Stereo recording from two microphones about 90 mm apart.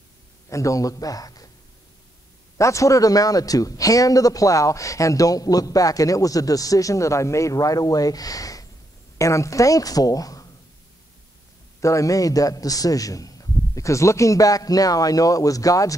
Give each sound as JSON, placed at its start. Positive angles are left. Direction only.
{"t": 0.5, "sound": "a man's voice", "side_deg": 35}
{"t": 2.5, "sound": "a man's voice", "side_deg": 35}
{"t": 11.8, "sound": "a man's voice", "side_deg": 35}